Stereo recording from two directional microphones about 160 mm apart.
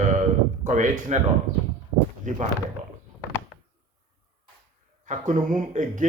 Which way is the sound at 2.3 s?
50° right (ahead or behind).